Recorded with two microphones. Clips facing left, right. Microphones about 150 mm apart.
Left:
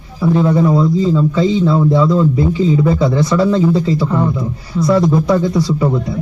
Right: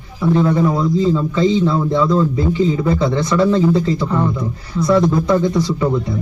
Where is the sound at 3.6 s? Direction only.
5° left (ahead or behind).